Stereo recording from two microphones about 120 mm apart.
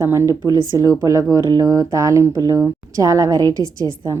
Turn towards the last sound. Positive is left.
turn(degrees=-30)  # may be behind; listen again after turning